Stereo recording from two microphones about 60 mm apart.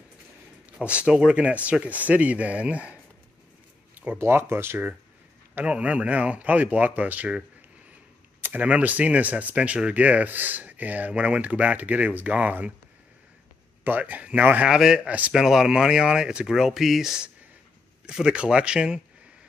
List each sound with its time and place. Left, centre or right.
0.7 s speech: centre
3.9 s a sound: right
4.2 s speech: right
5.7 s speech: right
13.8 s speech: right
14.7 s speech: centre
15.0 s speech: right
15.3 s speech: centre